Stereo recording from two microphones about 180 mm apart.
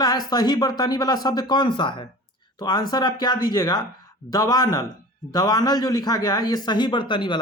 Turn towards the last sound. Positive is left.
turn(degrees=25)  # may be behind; listen again after turning